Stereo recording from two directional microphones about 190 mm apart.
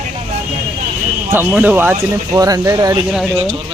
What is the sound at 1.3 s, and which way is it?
Speech, 10° right (ahead or behind).